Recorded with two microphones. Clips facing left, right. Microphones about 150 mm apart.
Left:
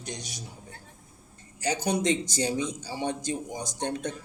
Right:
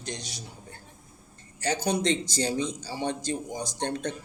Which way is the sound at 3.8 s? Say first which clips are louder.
Even; 10° left (ahead or behind).